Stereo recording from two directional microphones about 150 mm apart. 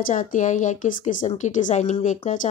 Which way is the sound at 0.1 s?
60° left (ahead or behind).